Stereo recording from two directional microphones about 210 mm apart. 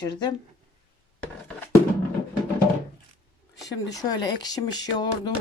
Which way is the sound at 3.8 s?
15° left (ahead or behind).